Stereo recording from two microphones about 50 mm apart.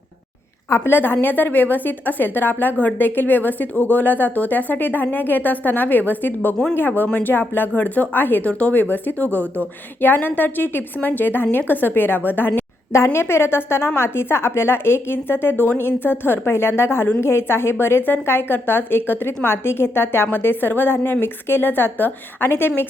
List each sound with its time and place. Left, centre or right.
0.9 s a woman's voice: left
8.4 s a woman's voice: left
13.1 s a woman's voice: left